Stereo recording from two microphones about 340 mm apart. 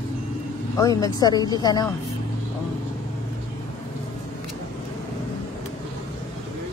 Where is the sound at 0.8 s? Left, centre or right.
Centre.